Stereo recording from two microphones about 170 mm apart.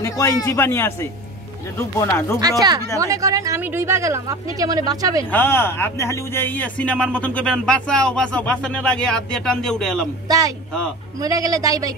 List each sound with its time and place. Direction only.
0.0 s a man's voice: 15° left (ahead or behind)
3.0 s speech: 20° right (ahead or behind)
5.3 s speech: 15° left (ahead or behind)
10.2 s speech: 20° right (ahead or behind)